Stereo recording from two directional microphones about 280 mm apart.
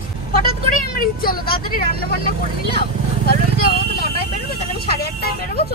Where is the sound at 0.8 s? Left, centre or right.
Left.